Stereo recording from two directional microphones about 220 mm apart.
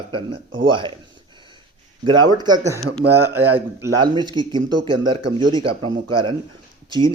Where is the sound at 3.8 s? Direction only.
20° right (ahead or behind).